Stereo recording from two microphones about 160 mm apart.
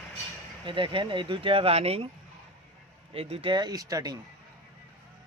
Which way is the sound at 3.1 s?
35° right (ahead or behind).